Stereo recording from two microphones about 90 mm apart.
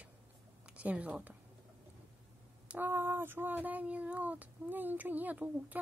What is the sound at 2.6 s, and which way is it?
Speech, 20° right (ahead or behind).